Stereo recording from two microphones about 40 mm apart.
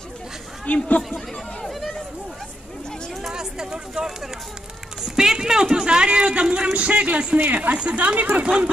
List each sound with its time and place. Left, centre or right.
0.7 s speech: left
3.3 s a sound: centre
5.0 s speech: centre; by 8.5 s right